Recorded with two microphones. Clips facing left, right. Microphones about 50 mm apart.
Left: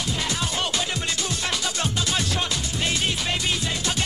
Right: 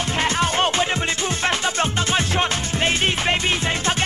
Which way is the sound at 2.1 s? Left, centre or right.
Right.